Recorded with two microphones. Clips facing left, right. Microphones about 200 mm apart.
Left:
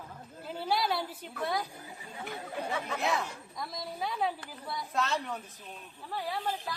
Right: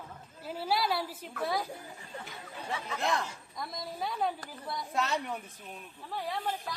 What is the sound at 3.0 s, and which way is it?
A woman's voice, 5° left (ahead or behind).